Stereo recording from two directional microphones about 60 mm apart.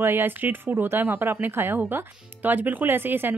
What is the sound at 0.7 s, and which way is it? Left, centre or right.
Speech, right.